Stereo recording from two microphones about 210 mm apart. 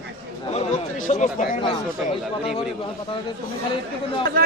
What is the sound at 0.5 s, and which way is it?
Speech, 35° left (ahead or behind).